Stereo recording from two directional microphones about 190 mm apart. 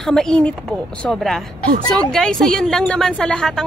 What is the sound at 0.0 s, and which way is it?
A woman's voice, 5° left (ahead or behind).